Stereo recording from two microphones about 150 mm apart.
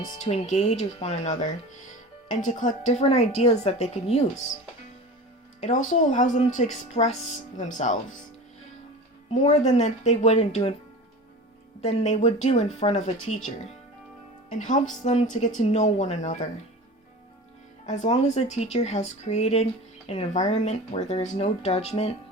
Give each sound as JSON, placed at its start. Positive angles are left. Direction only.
{"t": 0.2, "sound": "a woman's voice", "side_deg": 50}
{"t": 5.5, "sound": "speech", "side_deg": 55}
{"t": 9.3, "sound": "a woman's voice", "side_deg": 45}
{"t": 11.8, "sound": "a woman's voice", "side_deg": 45}
{"t": 17.8, "sound": "a woman's voice", "side_deg": 50}